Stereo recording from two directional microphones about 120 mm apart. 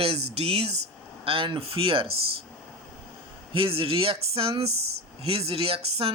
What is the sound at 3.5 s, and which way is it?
Speech, 50° right (ahead or behind).